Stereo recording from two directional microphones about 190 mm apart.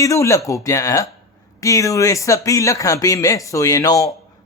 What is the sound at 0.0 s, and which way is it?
Speech, 15° left (ahead or behind).